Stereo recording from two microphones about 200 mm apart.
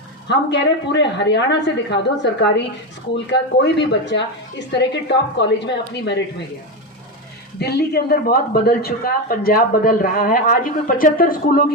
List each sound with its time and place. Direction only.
0.3 s a woman's voice: 60° left (ahead or behind)
7.6 s a man's voice: 55° left (ahead or behind)